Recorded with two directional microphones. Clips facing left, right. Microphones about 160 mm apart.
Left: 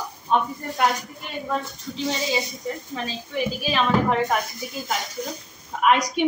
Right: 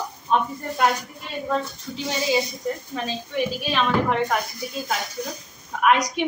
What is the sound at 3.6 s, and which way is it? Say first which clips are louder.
Speech: left 2 dB; centre (ahead or behind).